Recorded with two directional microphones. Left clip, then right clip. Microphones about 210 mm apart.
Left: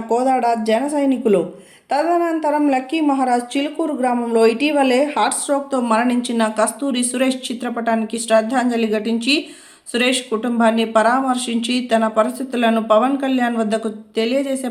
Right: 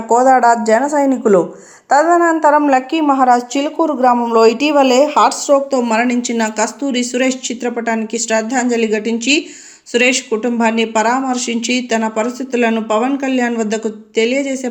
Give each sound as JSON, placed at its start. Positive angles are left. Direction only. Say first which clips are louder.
{"t": 0.4, "sound": "a woman's voice", "louder": "right 6 dB", "side_deg": -10}
{"t": 1.9, "sound": "a woman's voice", "louder": "right 7 dB", "side_deg": 5}